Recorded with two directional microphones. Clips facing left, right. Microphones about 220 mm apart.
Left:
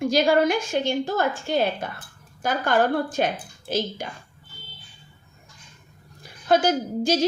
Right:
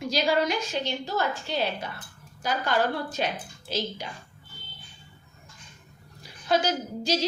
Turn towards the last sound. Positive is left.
turn(degrees=50)  # may be behind; listen again after turning